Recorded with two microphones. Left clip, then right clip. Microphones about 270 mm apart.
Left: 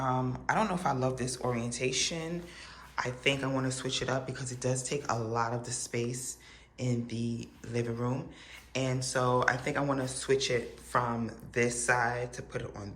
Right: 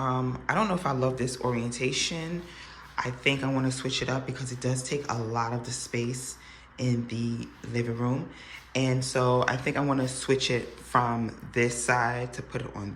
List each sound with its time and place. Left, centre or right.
0.0 s speech: centre